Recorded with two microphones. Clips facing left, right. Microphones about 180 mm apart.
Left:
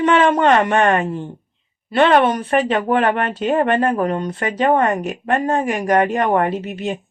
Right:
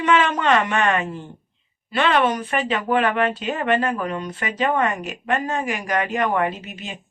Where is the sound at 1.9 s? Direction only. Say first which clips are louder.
Left 5 dB; 50° left (ahead or behind).